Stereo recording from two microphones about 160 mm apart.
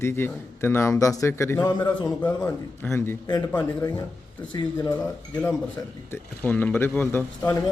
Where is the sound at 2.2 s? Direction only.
10° left (ahead or behind).